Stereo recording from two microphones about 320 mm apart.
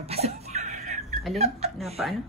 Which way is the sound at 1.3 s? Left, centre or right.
Centre.